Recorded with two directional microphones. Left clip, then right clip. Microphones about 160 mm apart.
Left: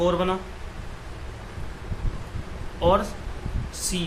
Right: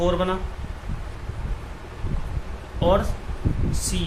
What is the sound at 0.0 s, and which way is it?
Speech, 15° left (ahead or behind).